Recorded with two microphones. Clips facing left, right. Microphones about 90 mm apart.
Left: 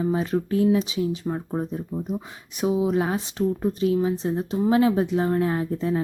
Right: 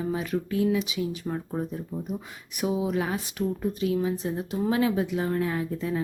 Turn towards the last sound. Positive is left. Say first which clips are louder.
# left 4 dB
turn(degrees=35)  # may be behind; listen again after turning